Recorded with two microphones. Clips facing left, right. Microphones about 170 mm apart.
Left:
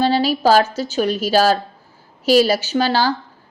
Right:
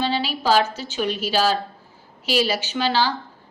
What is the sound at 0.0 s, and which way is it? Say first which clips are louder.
A woman's voice: left 7 dB; 40° left (ahead or behind).